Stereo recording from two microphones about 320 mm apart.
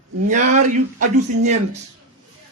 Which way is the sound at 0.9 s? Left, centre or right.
Right.